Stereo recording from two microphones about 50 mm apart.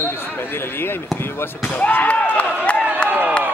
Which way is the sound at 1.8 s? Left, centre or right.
Left.